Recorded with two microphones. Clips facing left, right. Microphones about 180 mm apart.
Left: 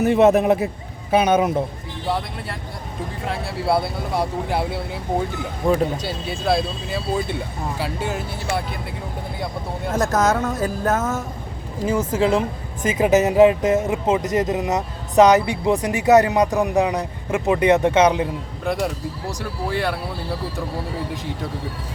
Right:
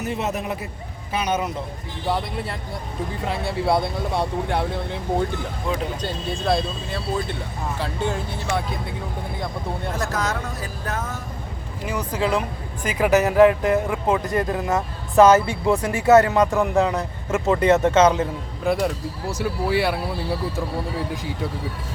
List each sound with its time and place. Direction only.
0.0 s a man's voice: 60° left (ahead or behind)
2.0 s speech: centre (ahead or behind)
6.0 s speech: 5° left (ahead or behind)
9.9 s speech: 45° left (ahead or behind)
11.9 s speech: 25° left (ahead or behind)
18.6 s speech: centre (ahead or behind)